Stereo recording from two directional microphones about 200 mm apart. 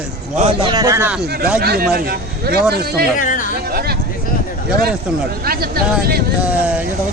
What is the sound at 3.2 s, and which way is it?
Speech, 40° left (ahead or behind).